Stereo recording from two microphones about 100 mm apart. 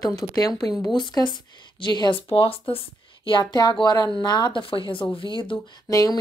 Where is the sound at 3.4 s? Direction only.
45° left (ahead or behind).